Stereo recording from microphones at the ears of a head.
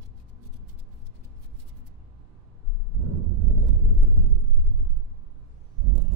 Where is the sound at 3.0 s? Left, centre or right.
Right.